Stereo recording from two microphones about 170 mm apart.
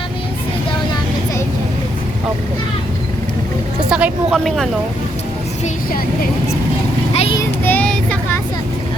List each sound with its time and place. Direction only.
3.8 s a woman's voice: 5° right (ahead or behind)
7.1 s vehicle: 35° left (ahead or behind)
7.3 s child singing: 10° left (ahead or behind)